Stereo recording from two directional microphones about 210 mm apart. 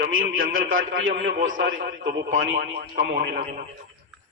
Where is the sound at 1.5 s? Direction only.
45° right (ahead or behind).